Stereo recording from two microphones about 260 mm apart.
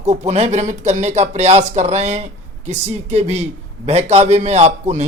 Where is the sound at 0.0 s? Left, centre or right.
Right.